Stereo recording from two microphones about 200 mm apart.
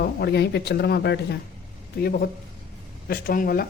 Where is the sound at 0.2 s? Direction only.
55° left (ahead or behind).